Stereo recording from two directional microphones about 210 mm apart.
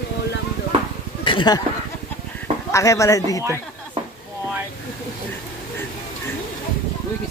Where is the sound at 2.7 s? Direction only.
15° left (ahead or behind).